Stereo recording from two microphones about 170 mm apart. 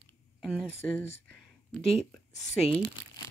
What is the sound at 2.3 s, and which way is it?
Speech, 45° left (ahead or behind).